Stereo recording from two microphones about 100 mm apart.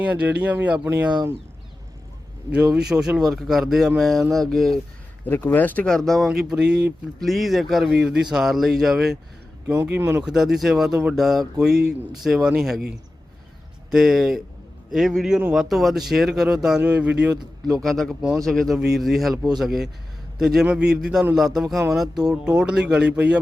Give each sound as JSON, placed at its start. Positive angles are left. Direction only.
{"t": 0.0, "sound": "speech", "side_deg": -15}
{"t": 2.5, "sound": "speech", "side_deg": -10}
{"t": 5.2, "sound": "speech", "side_deg": 20}
{"t": 6.2, "sound": "speech", "side_deg": -10}
{"t": 9.6, "sound": "speech", "side_deg": -15}
{"t": 10.2, "sound": "speech", "side_deg": -5}
{"t": 13.9, "sound": "speech", "side_deg": -5}
{"t": 17.7, "sound": "speech", "side_deg": 5}